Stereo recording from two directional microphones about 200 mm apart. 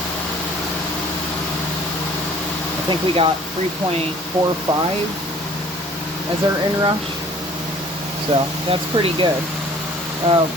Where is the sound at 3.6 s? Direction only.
35° right (ahead or behind).